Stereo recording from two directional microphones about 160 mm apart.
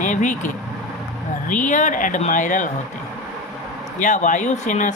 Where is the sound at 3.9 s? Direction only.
50° left (ahead or behind).